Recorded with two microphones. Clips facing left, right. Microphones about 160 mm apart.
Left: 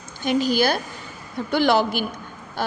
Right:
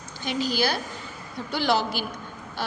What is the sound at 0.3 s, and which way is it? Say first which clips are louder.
A woman's voice: left 6 dB; 50° left (ahead or behind).